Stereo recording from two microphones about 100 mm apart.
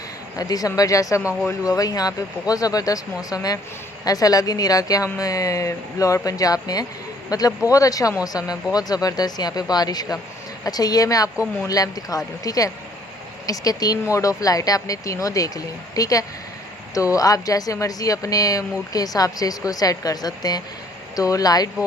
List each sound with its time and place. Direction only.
0.3 s a woman's voice: 40° left (ahead or behind)